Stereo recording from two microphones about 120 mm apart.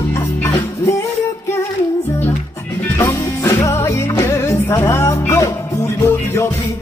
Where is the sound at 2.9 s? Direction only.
20° left (ahead or behind).